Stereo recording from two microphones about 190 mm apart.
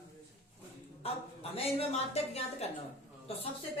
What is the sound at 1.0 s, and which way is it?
A woman's voice, 30° left (ahead or behind).